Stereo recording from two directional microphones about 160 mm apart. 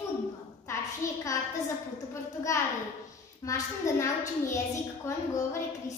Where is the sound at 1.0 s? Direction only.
20° left (ahead or behind).